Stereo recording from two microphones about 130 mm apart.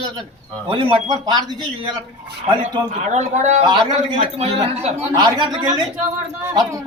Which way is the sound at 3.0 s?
60° right (ahead or behind).